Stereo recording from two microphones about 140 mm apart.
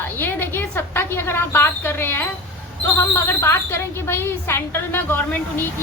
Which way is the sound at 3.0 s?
20° left (ahead or behind).